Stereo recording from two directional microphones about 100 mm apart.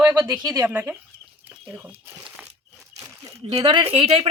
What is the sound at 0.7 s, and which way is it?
Speech, 20° right (ahead or behind).